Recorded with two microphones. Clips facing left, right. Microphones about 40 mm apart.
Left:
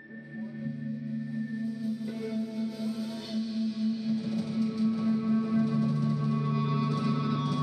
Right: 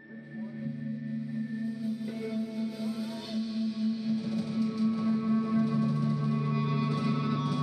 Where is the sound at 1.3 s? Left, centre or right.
Centre.